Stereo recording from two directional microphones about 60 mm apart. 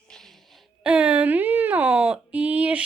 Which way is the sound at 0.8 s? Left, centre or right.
Centre.